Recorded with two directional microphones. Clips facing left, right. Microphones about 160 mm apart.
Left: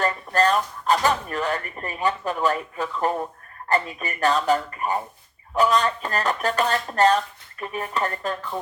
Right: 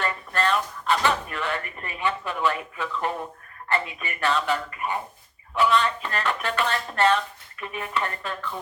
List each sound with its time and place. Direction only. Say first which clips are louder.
0.0 s speech: left 5 dB; 40° left (ahead or behind)